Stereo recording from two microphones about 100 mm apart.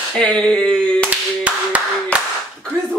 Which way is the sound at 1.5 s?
15° right (ahead or behind).